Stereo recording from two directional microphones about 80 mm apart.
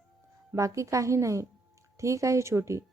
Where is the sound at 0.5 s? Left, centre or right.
Right.